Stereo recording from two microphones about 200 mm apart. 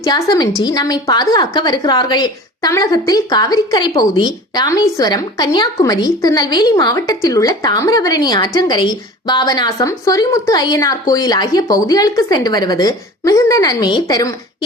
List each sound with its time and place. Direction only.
0.0 s a woman's voice: 15° left (ahead or behind)